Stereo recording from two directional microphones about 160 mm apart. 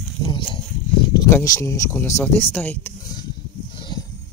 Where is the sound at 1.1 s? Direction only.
20° left (ahead or behind).